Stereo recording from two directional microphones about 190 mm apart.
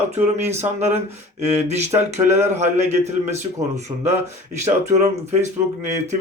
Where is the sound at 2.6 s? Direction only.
35° right (ahead or behind).